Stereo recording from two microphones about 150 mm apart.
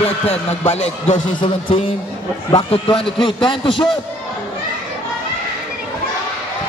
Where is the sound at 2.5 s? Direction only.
30° left (ahead or behind).